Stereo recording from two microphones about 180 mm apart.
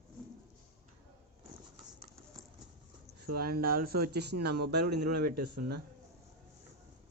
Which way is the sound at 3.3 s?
55° right (ahead or behind).